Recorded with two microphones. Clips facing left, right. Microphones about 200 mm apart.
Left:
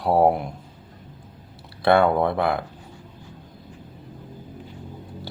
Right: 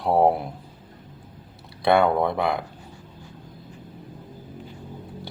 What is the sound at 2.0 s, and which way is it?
Speech, 5° left (ahead or behind).